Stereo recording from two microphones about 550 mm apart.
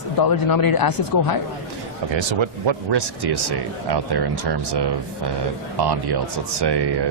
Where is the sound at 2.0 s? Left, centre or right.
Right.